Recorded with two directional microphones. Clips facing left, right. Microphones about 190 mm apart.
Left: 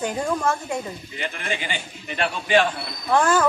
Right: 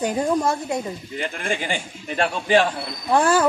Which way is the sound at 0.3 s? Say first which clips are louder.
Right 3 dB; 15° right (ahead or behind).